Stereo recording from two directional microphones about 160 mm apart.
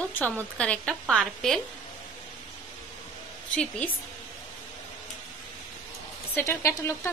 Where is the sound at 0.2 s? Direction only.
5° left (ahead or behind).